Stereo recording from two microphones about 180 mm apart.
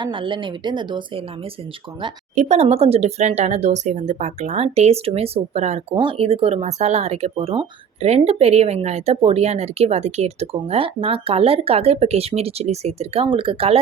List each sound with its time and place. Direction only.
0.0 s speech: 25° right (ahead or behind)
2.3 s speech: 40° right (ahead or behind)